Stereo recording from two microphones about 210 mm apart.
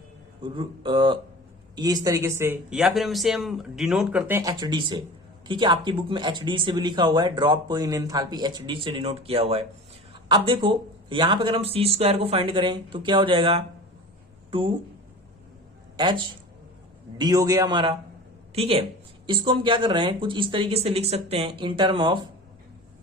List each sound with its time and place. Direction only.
0.4 s speech: 20° right (ahead or behind)
16.0 s speech: 25° right (ahead or behind)